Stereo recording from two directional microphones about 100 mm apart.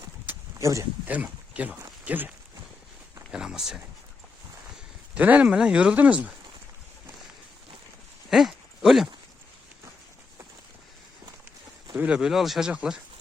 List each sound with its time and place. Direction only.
0.3 s a sound: 20° right (ahead or behind)
0.6 s speech: 30° right (ahead or behind)
1.0 s speech: 15° right (ahead or behind)
3.3 s speech: 5° right (ahead or behind)
5.1 s speech: 15° right (ahead or behind)
8.3 s a sound: 5° right (ahead or behind)
11.9 s speech: 10° right (ahead or behind)